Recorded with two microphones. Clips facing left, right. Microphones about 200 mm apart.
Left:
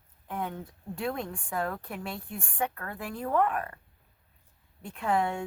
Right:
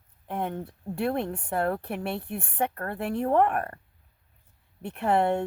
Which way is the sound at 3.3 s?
55° right (ahead or behind).